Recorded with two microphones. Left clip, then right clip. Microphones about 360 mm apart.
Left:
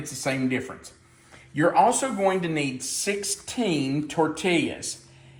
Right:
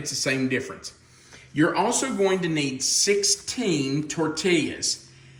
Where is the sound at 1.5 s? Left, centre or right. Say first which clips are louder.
Left 3 dB; centre.